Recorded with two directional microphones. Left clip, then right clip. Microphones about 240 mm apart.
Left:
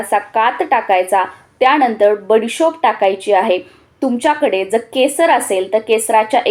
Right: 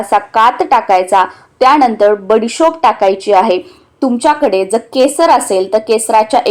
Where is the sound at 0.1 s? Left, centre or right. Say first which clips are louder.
Right 5 dB; right.